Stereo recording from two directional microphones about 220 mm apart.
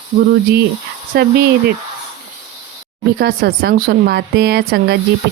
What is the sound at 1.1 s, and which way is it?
Speech, 40° right (ahead or behind).